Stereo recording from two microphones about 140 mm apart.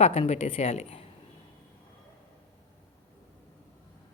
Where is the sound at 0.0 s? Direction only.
45° left (ahead or behind).